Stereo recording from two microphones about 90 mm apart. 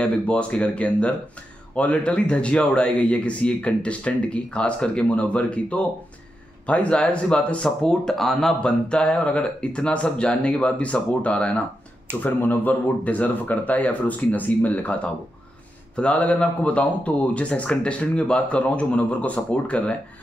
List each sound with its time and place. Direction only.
0.0 s speech: 10° left (ahead or behind)
16.0 s speech: 15° left (ahead or behind)